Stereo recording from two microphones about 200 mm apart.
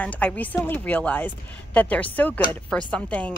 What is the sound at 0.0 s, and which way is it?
A woman's voice, 5° left (ahead or behind).